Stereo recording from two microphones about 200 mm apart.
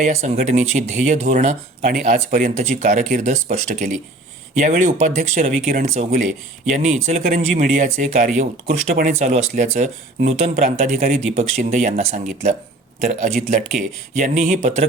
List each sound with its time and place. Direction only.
0.0 s speech: 35° right (ahead or behind)